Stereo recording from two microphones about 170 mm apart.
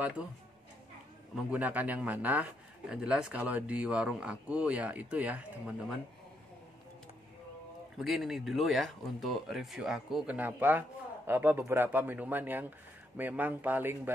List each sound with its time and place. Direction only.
0.2 s speech: 5° right (ahead or behind)
8.0 s speech: centre (ahead or behind)